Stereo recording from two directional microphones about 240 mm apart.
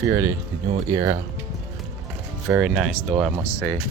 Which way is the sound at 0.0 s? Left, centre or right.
Centre.